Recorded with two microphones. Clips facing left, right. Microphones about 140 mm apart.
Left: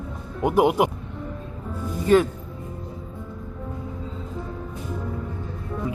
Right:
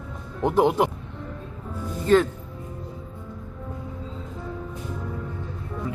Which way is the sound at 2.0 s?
10° left (ahead or behind).